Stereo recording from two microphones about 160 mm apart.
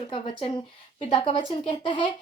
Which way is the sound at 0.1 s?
35° left (ahead or behind).